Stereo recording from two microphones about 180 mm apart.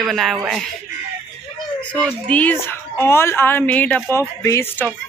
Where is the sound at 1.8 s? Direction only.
5° left (ahead or behind).